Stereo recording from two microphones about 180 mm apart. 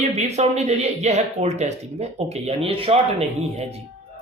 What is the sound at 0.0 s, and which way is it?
Speech, 35° right (ahead or behind).